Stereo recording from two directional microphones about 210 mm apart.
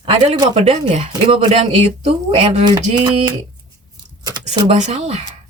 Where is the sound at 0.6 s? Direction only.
30° right (ahead or behind).